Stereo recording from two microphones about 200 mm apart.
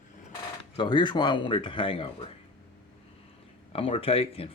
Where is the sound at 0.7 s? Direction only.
25° left (ahead or behind).